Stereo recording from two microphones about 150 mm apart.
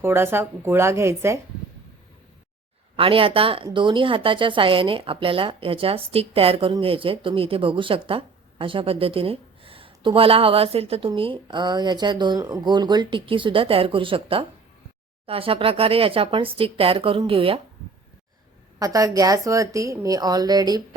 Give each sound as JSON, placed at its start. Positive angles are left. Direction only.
{"t": 0.0, "sound": "speech", "side_deg": -15}
{"t": 2.9, "sound": "speech", "side_deg": -35}
{"t": 18.8, "sound": "a woman's voice", "side_deg": -20}